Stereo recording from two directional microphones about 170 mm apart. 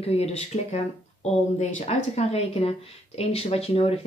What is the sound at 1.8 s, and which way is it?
Speech, 40° left (ahead or behind).